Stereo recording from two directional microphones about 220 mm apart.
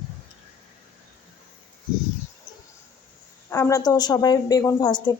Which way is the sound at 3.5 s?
15° left (ahead or behind).